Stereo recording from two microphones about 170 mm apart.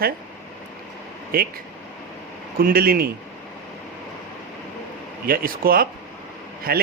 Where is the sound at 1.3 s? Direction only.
60° right (ahead or behind).